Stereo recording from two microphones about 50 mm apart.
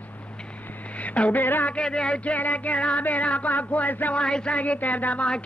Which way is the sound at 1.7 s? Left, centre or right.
Centre.